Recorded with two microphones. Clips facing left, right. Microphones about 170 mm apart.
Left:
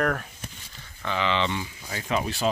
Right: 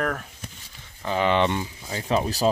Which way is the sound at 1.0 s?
45° right (ahead or behind).